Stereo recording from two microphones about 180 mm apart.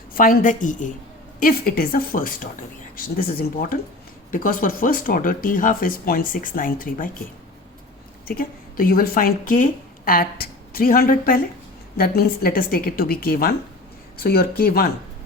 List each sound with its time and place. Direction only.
0.1 s speech: 55° left (ahead or behind)
8.3 s a woman's voice: 55° left (ahead or behind)